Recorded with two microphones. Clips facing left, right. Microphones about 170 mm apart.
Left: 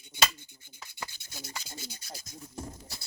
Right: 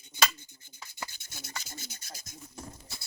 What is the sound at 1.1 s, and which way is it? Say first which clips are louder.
Rub: left 1 dB; 45° right (ahead or behind).